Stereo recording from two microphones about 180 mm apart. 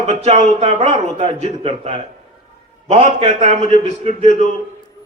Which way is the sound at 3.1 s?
35° right (ahead or behind).